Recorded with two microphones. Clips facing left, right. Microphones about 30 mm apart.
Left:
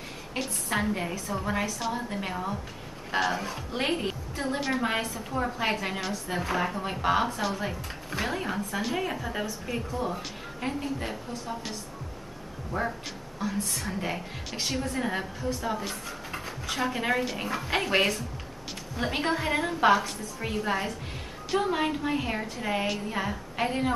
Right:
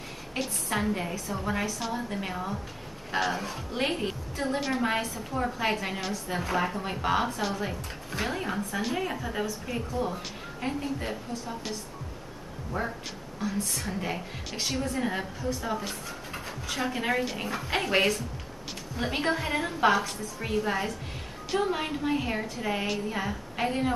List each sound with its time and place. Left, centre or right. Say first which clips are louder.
0.3 s a woman's voice: even; centre
12.7 s speech: left 2 dB; centre
13.4 s a woman's voice: even; centre